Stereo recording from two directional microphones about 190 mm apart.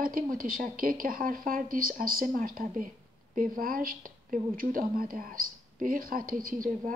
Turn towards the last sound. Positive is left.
turn(degrees=-50)  # may be behind; listen again after turning